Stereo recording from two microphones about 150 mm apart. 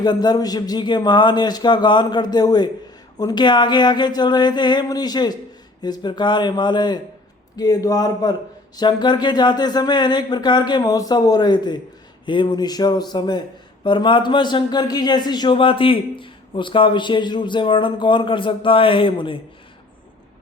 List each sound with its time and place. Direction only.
0.0 s a man's voice: 30° left (ahead or behind)